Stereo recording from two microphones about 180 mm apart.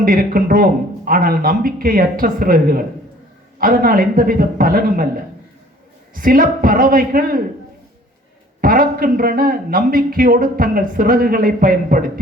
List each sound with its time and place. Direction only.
0.0 s a man's voice: 50° right (ahead or behind)
6.1 s a man's voice: 50° right (ahead or behind)
8.6 s a man's voice: 50° right (ahead or behind)